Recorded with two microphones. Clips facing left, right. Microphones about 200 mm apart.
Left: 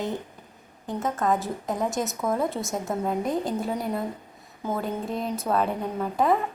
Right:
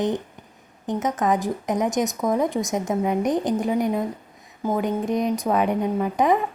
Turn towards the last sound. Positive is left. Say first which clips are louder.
# right 3 dB
turn(degrees=-15)  # may be behind; listen again after turning